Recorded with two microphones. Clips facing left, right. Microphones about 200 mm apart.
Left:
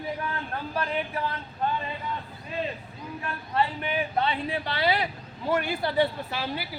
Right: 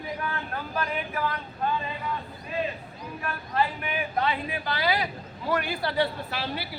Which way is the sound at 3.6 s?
25° left (ahead or behind).